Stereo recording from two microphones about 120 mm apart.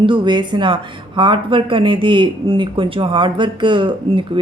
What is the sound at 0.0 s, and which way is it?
A woman's voice, 40° right (ahead or behind).